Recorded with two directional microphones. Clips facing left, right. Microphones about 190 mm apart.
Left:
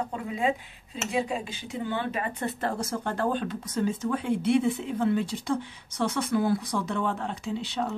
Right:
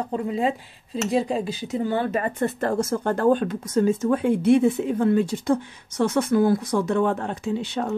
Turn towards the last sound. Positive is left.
turn(degrees=-50)  # may be behind; listen again after turning